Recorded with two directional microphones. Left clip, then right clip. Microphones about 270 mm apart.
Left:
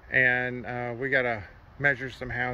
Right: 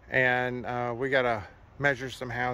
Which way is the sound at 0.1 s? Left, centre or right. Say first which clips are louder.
Left 2 dB; centre.